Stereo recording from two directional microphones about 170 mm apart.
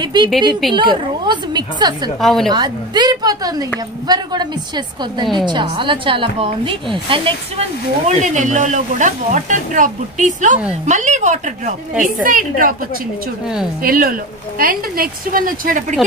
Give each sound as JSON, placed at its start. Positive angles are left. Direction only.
{"t": 0.0, "sound": "a woman's voice", "side_deg": -25}
{"t": 2.1, "sound": "a woman's voice", "side_deg": 0}
{"t": 2.5, "sound": "a woman's voice", "side_deg": -25}
{"t": 8.1, "sound": "speech", "side_deg": -45}
{"t": 13.8, "sound": "a woman's voice", "side_deg": -60}